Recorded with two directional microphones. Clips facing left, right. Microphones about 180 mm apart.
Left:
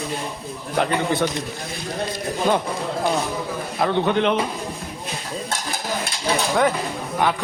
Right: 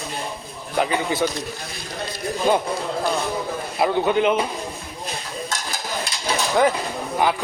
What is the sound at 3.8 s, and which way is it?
Speech, 5° right (ahead or behind).